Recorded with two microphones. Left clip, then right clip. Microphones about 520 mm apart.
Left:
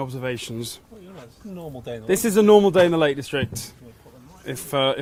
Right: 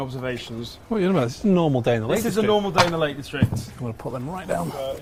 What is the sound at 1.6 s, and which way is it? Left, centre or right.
Speech, right.